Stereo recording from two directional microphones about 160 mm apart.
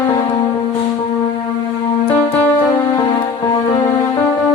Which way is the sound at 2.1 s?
10° left (ahead or behind).